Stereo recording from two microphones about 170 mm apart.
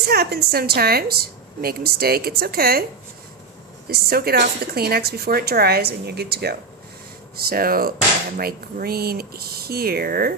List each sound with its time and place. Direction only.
0.1 s a woman's voice: 70° right (ahead or behind)
3.8 s a woman's voice: 65° right (ahead or behind)